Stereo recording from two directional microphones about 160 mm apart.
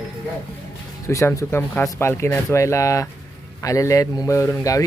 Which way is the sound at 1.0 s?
20° left (ahead or behind).